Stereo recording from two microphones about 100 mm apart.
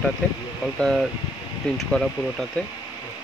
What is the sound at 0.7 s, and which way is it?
Speech, 5° left (ahead or behind).